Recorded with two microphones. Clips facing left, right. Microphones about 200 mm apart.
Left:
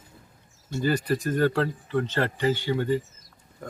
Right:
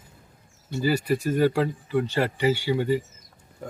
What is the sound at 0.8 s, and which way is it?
Speech, 10° right (ahead or behind).